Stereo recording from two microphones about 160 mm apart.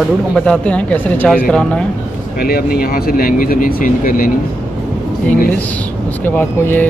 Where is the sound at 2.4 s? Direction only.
70° left (ahead or behind).